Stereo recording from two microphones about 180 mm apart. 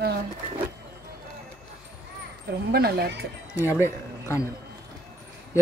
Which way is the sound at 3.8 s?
15° left (ahead or behind).